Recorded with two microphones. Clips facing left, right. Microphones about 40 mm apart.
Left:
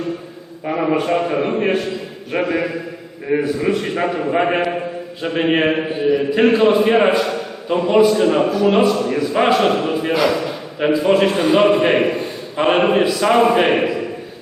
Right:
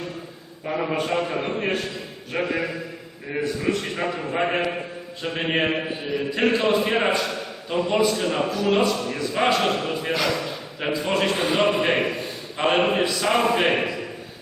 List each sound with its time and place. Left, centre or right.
0.6 s a man's voice: left
6.1 s speech: centre